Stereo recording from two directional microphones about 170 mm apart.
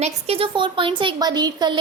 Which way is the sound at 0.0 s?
35° right (ahead or behind).